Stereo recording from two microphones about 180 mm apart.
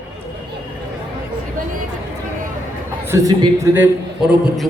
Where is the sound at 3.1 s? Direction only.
20° right (ahead or behind).